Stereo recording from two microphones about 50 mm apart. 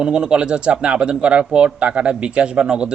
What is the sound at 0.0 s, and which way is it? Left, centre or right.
A man's voice, centre.